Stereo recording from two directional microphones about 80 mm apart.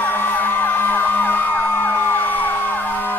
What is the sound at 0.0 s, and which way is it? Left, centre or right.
Emergency vehicle, left.